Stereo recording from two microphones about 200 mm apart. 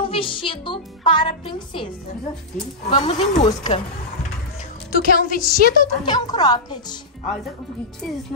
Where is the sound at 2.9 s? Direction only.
25° left (ahead or behind).